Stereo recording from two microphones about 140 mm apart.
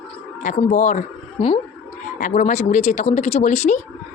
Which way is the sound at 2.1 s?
65° left (ahead or behind).